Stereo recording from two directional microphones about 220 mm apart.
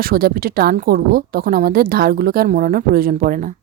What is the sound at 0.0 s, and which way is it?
A woman's voice, 40° right (ahead or behind).